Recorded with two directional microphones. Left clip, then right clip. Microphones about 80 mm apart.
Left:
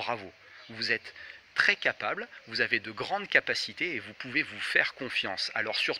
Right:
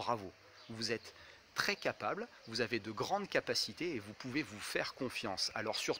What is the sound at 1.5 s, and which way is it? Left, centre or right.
Speech, right.